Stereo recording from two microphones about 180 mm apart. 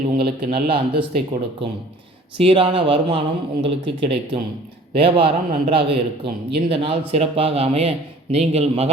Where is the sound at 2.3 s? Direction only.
30° right (ahead or behind).